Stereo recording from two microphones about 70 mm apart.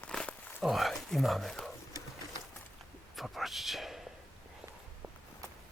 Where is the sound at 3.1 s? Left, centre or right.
Centre.